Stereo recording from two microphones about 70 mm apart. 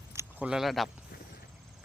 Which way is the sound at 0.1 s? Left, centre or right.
Right.